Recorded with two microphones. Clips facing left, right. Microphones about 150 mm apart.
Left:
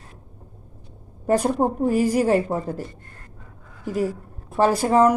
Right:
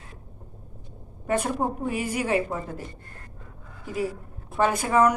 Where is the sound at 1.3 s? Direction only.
35° left (ahead or behind).